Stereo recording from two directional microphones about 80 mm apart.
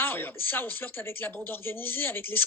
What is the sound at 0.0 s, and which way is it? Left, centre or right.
Speech, left.